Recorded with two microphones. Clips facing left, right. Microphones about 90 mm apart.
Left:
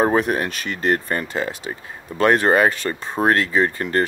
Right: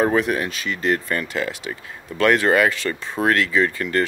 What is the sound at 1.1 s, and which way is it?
Speech, 30° left (ahead or behind).